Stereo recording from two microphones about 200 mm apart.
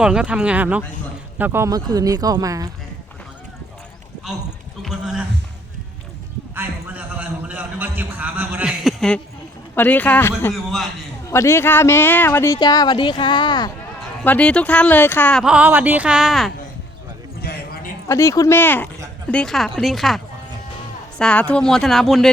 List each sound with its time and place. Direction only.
0.0 s speech: 5° right (ahead or behind)
4.8 s a sound: centre (ahead or behind)
6.5 s a sound: 10° right (ahead or behind)
9.7 s speech: 10° left (ahead or behind)
10.5 s speech: centre (ahead or behind)
11.3 s speech: 15° left (ahead or behind)
14.3 s speech: 5° left (ahead or behind)
15.4 s speech: 5° right (ahead or behind)
17.4 s a sound: 50° left (ahead or behind)
18.1 s speech: 15° left (ahead or behind)